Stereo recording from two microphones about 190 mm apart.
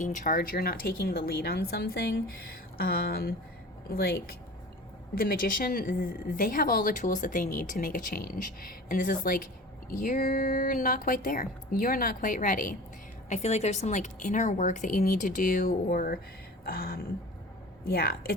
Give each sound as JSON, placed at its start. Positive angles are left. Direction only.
{"t": 0.0, "sound": "a woman's voice", "side_deg": 40}